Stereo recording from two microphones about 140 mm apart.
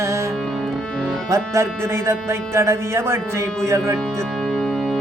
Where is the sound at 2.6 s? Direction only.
20° right (ahead or behind).